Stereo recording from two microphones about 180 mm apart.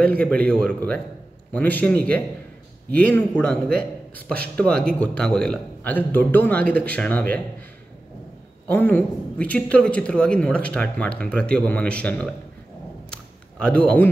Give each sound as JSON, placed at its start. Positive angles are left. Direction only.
{"t": 0.1, "sound": "speech", "side_deg": 10}
{"t": 8.6, "sound": "speech", "side_deg": 10}
{"t": 13.1, "sound": "a sound", "side_deg": 5}